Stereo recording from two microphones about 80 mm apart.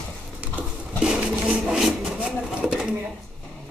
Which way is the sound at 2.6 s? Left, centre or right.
Centre.